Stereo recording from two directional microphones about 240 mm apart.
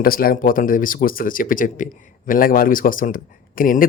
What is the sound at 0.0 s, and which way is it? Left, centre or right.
Speech, left.